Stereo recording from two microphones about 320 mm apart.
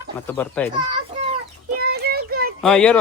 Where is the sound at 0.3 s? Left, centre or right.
Centre.